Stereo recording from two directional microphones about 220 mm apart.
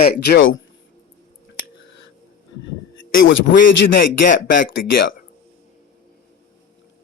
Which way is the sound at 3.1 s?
60° left (ahead or behind).